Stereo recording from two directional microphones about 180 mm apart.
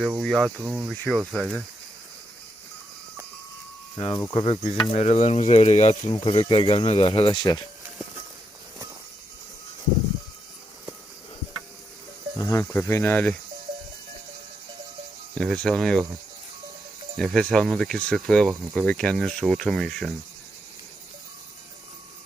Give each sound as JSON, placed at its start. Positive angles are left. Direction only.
{"t": 0.0, "sound": "speech", "side_deg": 0}
{"t": 3.9, "sound": "speech", "side_deg": 20}
{"t": 4.4, "sound": "speech", "side_deg": 35}
{"t": 12.4, "sound": "speech", "side_deg": 15}
{"t": 15.4, "sound": "speech", "side_deg": 5}
{"t": 17.2, "sound": "speech", "side_deg": 5}